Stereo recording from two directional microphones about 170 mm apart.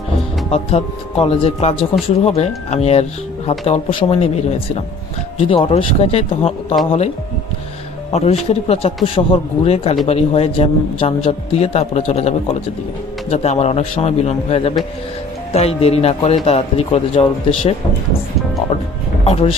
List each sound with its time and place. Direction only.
0.5 s speech: 35° left (ahead or behind)
8.1 s speech: 35° left (ahead or behind)
19.2 s speech: 35° left (ahead or behind)